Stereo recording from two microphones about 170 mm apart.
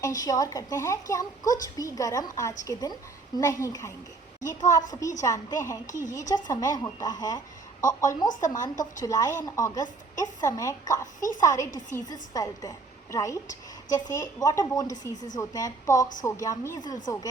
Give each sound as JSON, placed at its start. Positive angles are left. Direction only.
{"t": 0.0, "sound": "speech", "side_deg": 20}
{"t": 4.4, "sound": "a woman's voice", "side_deg": 45}
{"t": 4.9, "sound": "speech", "side_deg": 20}
{"t": 11.0, "sound": "a woman's voice", "side_deg": 50}
{"t": 11.3, "sound": "speech", "side_deg": 20}